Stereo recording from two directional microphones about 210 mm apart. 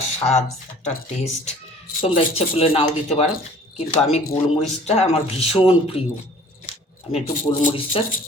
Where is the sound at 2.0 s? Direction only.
30° left (ahead or behind).